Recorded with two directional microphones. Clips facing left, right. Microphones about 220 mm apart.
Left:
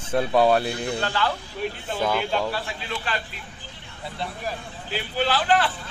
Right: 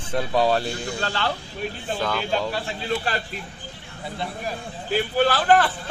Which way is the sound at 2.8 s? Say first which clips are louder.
Right 5 dB; 40° right (ahead or behind).